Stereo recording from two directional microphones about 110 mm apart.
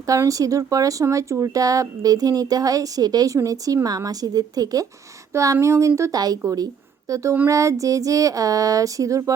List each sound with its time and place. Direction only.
0.1 s speech: 30° right (ahead or behind)